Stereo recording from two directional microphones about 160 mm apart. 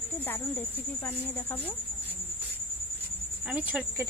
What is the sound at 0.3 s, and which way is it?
Speech, 10° left (ahead or behind).